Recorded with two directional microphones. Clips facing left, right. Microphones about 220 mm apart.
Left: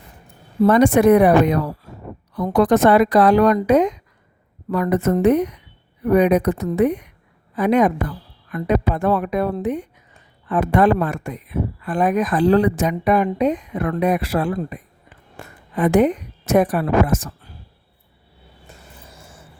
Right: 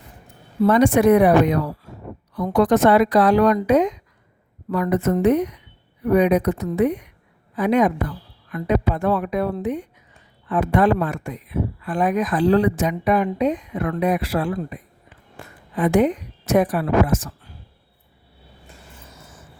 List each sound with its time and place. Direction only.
0.6 s a woman's voice: 50° left (ahead or behind)
15.8 s speech: 50° left (ahead or behind)
19.1 s a sound: 30° left (ahead or behind)